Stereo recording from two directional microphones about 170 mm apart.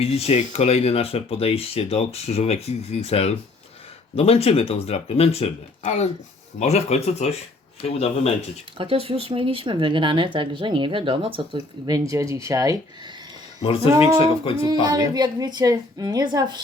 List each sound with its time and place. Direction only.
0.0 s speech: 35° left (ahead or behind)
8.8 s speech: 35° right (ahead or behind)
13.6 s speech: 35° left (ahead or behind)
14.7 s speech: 25° right (ahead or behind)